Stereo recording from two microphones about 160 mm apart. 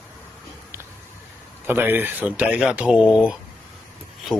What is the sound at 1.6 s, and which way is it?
A man's voice, 15° right (ahead or behind).